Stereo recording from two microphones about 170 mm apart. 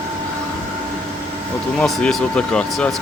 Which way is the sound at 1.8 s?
5° left (ahead or behind).